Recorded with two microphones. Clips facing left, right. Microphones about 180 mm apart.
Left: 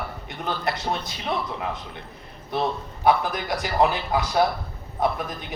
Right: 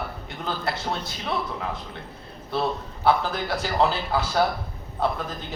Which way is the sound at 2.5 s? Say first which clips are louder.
Even; 20° left (ahead or behind).